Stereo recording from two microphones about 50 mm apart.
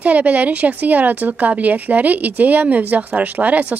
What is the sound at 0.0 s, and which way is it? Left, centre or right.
A woman's voice, right.